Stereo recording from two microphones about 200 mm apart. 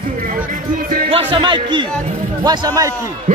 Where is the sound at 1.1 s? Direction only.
30° right (ahead or behind).